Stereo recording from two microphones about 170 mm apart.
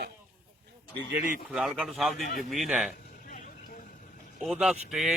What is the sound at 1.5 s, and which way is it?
Speech, 5° right (ahead or behind).